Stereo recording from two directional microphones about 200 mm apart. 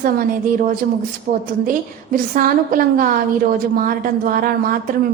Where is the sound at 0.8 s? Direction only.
45° right (ahead or behind).